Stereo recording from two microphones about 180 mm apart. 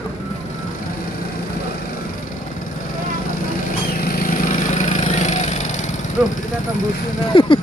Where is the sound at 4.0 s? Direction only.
50° left (ahead or behind).